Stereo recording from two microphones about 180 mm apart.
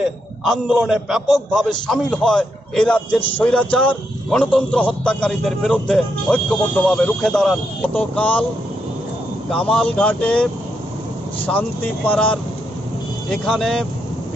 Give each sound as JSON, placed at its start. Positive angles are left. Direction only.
{"t": 0.0, "sound": "a man's voice", "side_deg": -5}
{"t": 9.5, "sound": "a man's voice", "side_deg": 5}